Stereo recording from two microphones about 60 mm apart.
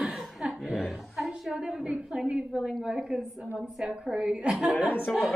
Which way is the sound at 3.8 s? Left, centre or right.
Centre.